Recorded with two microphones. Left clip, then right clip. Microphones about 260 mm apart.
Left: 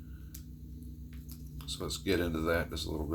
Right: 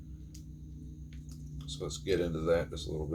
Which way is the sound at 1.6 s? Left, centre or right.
Left.